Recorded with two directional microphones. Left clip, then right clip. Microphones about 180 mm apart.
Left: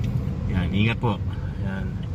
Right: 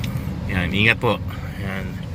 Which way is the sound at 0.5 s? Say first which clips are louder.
Right 9 dB; centre (ahead or behind).